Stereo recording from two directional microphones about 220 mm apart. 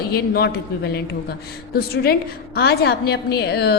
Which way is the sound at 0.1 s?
45° left (ahead or behind).